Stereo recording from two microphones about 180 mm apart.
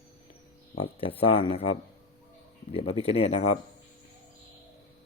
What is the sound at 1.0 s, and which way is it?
Speech, 30° left (ahead or behind).